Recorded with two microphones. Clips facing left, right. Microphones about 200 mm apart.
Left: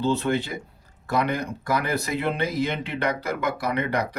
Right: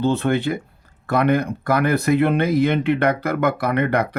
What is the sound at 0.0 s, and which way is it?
Speech, 55° right (ahead or behind).